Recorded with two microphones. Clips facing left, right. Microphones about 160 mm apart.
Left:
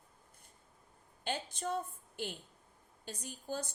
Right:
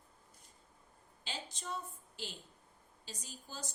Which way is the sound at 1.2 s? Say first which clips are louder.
Left 7 dB; 55° left (ahead or behind).